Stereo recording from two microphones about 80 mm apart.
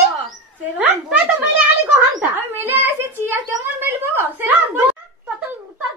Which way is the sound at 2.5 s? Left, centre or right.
Right.